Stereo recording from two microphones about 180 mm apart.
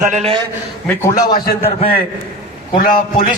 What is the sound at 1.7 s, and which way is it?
Speech, 30° left (ahead or behind).